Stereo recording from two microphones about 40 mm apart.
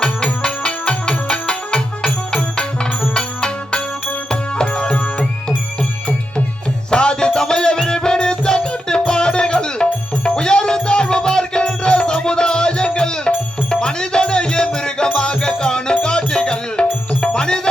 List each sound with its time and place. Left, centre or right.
0.4 s music: left
6.9 s music: left